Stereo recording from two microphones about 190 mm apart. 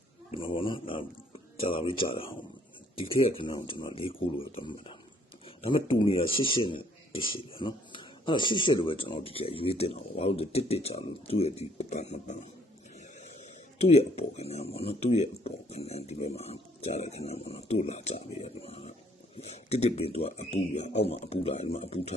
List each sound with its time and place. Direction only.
0.3 s speech: 25° left (ahead or behind)
13.7 s speech: 35° left (ahead or behind)